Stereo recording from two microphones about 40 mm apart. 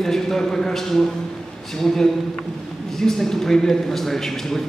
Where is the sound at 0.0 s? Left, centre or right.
Centre.